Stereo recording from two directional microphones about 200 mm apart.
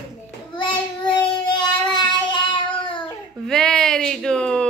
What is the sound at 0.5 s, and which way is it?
Child singing, 25° left (ahead or behind).